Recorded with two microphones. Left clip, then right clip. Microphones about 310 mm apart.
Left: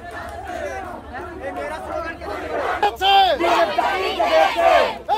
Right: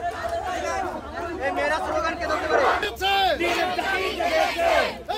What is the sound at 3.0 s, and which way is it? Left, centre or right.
Speech, centre.